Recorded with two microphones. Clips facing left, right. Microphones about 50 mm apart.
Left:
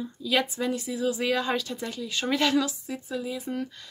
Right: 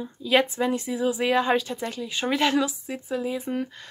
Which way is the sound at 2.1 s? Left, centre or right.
Centre.